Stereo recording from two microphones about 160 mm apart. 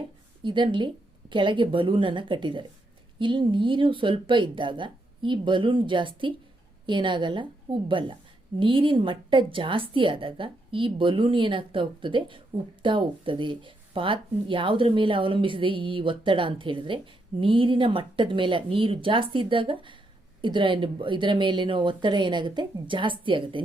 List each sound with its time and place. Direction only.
0.4 s speech: 30° right (ahead or behind)